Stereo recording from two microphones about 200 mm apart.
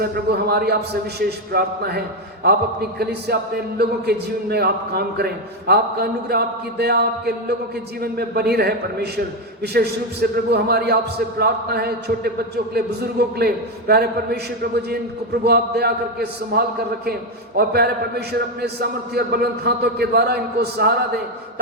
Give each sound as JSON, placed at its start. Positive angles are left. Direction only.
{"t": 0.0, "sound": "speech", "side_deg": -50}
{"t": 3.0, "sound": "speech", "side_deg": -50}